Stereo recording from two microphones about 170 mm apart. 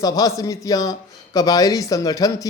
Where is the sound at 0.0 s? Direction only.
20° left (ahead or behind).